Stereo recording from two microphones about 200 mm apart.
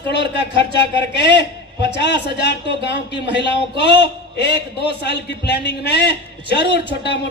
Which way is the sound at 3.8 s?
60° left (ahead or behind).